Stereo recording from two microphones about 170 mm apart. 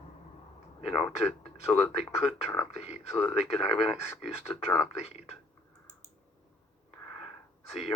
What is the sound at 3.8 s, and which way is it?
Speech, 15° left (ahead or behind).